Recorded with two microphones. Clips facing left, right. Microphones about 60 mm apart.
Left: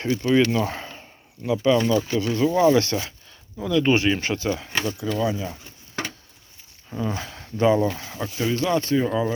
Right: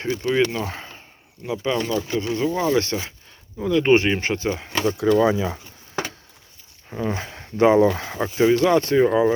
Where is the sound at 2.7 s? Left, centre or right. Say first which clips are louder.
Left 1 dB; centre.